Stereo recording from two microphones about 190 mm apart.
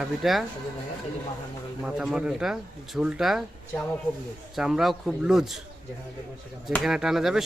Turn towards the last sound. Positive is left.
turn(degrees=0)  # may be behind; listen again after turning